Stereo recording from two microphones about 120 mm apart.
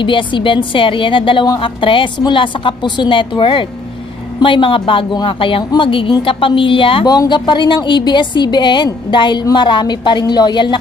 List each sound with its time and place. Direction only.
0.0 s a woman's voice: 45° left (ahead or behind)